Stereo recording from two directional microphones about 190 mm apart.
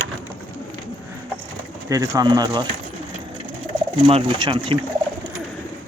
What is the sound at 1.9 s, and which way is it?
Speech, 20° right (ahead or behind).